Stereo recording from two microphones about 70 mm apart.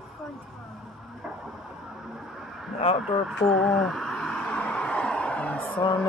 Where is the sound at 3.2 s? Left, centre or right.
Centre.